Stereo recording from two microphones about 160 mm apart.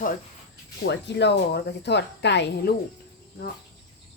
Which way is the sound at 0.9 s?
90° left.